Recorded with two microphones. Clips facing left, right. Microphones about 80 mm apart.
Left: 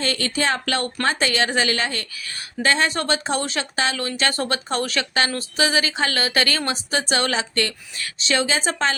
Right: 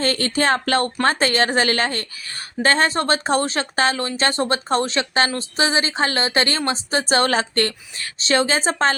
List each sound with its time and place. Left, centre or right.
0.0 s a woman's voice: right